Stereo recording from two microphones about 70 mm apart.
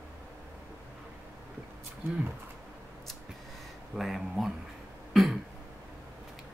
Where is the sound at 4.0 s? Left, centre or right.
Centre.